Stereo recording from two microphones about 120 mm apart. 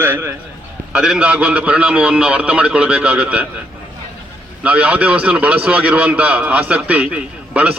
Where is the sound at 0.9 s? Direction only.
10° right (ahead or behind).